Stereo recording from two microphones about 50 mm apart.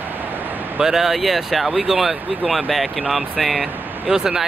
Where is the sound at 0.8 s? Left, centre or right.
Centre.